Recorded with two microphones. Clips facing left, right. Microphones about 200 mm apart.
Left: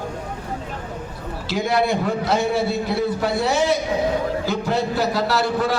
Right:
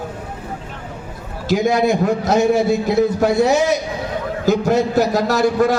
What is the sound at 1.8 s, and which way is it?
A man's voice, 45° right (ahead or behind).